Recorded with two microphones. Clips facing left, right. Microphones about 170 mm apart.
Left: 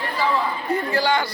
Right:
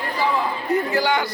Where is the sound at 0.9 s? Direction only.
20° right (ahead or behind).